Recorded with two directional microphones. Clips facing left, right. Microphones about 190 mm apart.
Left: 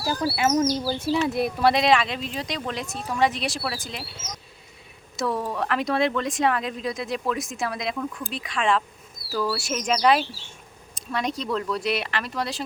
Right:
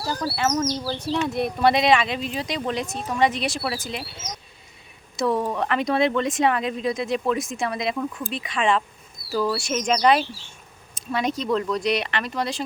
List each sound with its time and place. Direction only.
0.0 s speech: 10° left (ahead or behind)
5.1 s speech: centre (ahead or behind)